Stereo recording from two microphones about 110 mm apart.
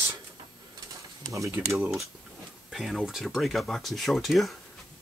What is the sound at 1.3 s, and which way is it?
Speech, 30° right (ahead or behind).